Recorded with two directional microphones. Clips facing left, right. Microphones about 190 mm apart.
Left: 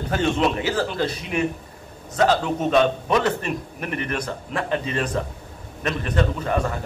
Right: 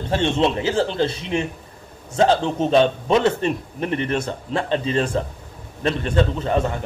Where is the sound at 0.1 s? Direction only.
30° right (ahead or behind).